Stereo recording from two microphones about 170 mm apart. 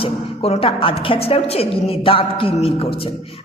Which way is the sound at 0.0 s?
35° left (ahead or behind).